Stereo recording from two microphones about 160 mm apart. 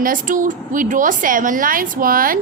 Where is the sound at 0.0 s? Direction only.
55° right (ahead or behind).